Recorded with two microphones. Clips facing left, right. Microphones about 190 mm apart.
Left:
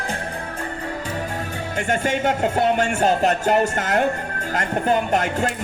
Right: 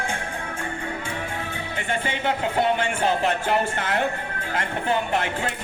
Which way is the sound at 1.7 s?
45° left (ahead or behind).